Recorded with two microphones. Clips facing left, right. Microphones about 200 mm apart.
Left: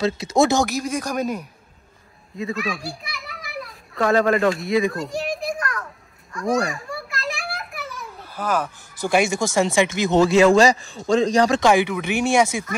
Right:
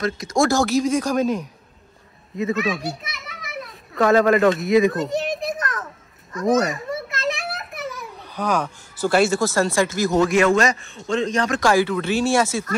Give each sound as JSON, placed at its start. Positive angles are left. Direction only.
{"t": 0.0, "sound": "speech", "side_deg": 25}
{"t": 2.3, "sound": "a child's voice", "side_deg": 0}
{"t": 4.8, "sound": "children playing", "side_deg": 0}
{"t": 9.0, "sound": "speech", "side_deg": 15}
{"t": 11.6, "sound": "speech", "side_deg": 20}